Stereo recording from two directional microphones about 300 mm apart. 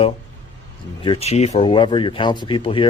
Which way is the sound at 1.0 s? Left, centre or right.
Centre.